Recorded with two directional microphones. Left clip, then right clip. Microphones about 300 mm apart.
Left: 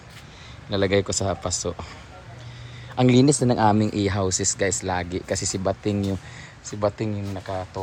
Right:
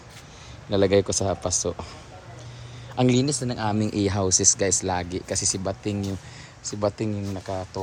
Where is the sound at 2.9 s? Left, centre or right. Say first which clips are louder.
Left 4 dB; centre.